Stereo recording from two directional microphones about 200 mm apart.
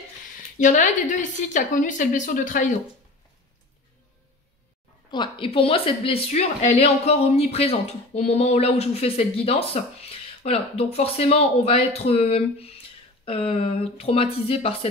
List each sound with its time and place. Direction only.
0.6 s a woman's voice: 40° left (ahead or behind)
5.1 s a woman's voice: 25° left (ahead or behind)